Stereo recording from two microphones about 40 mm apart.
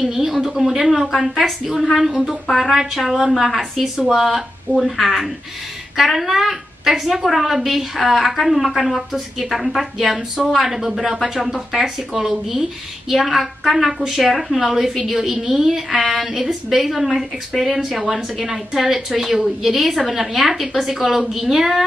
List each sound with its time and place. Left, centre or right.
0.0 s a woman's voice: centre